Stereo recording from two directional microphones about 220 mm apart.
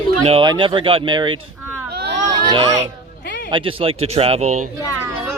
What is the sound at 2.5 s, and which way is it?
Speech, 25° right (ahead or behind).